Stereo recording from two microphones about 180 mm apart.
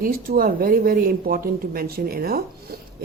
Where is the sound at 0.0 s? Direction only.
55° right (ahead or behind).